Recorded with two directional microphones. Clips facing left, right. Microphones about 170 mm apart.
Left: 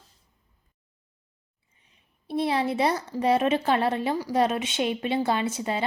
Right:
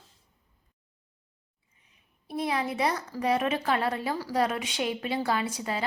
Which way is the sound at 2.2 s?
30° left (ahead or behind).